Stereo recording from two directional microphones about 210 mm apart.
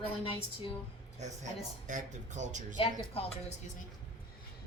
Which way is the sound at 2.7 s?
25° left (ahead or behind).